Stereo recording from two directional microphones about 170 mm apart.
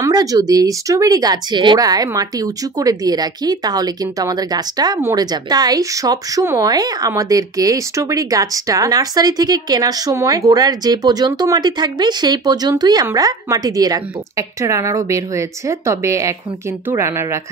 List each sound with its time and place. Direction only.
0.0 s a woman's voice: 20° right (ahead or behind)